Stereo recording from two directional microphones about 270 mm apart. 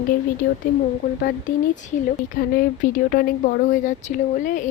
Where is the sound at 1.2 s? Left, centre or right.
Left.